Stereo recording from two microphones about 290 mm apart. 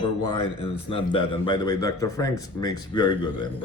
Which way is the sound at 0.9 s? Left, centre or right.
Centre.